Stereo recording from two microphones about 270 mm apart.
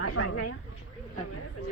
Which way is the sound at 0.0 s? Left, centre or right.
Left.